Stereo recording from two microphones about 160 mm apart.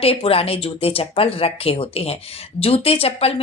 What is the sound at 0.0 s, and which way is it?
Speech, 35° left (ahead or behind).